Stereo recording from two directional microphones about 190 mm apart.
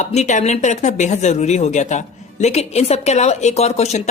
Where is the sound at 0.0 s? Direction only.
35° left (ahead or behind).